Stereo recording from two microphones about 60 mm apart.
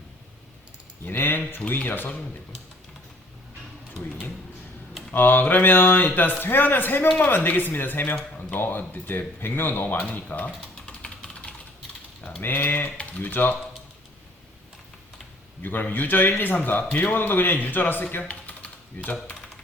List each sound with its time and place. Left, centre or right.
1.0 s a man's voice: left
5.1 s a man's voice: left
10.0 s speech: left
10.8 s typing: centre
12.4 s a man's voice: left
15.6 s a man's voice: left
18.2 s typing: left